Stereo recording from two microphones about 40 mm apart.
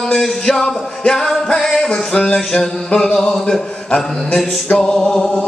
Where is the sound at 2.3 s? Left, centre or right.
Centre.